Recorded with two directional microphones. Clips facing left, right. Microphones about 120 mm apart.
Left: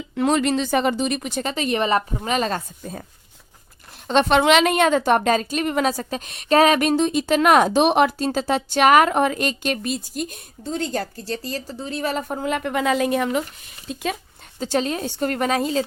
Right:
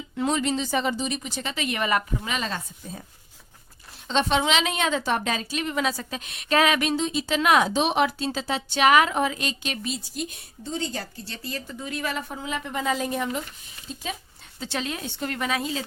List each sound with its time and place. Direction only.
0.2 s speech: 70° left (ahead or behind); by 2.0 s 30° left (ahead or behind)
2.2 s a woman's voice: 45° left (ahead or behind)
4.0 s a woman's voice: 60° left (ahead or behind)
11.4 s a woman's voice: 35° left (ahead or behind)
12.4 s speech: 60° left (ahead or behind); by 13.4 s 80° left
14.6 s a woman's voice: 40° left (ahead or behind)